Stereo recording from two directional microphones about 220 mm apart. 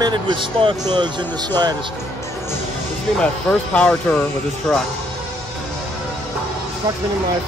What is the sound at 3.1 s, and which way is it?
Speech, 5° left (ahead or behind).